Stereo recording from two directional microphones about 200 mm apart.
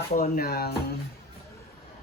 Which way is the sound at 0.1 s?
50° left (ahead or behind).